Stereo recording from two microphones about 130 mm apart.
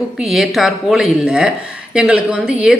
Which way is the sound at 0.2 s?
Centre (ahead or behind).